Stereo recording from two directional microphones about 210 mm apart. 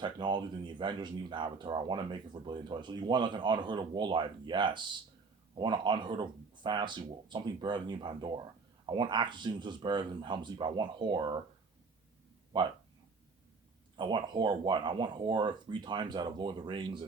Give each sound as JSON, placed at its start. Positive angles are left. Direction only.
{"t": 0.0, "sound": "speech", "side_deg": -20}
{"t": 13.9, "sound": "speech", "side_deg": -20}